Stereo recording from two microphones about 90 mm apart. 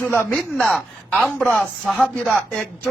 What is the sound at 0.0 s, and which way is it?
Speech, 25° left (ahead or behind).